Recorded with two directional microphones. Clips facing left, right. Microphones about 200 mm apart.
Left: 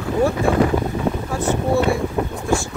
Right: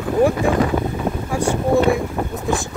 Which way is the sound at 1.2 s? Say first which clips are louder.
Right 1 dB; 15° right (ahead or behind).